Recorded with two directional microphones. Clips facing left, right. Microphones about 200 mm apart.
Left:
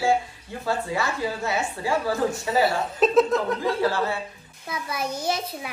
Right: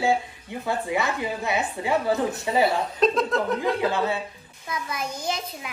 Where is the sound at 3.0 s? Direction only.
5° left (ahead or behind).